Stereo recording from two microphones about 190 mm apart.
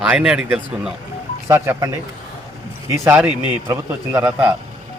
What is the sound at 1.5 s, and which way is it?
Speech, 15° right (ahead or behind).